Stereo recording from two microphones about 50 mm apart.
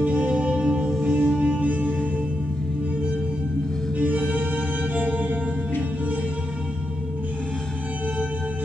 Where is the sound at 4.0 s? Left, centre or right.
Right.